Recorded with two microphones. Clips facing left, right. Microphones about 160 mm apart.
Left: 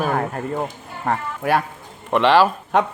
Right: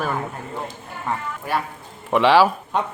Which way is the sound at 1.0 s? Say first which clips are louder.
Left 5 dB; 60° left (ahead or behind).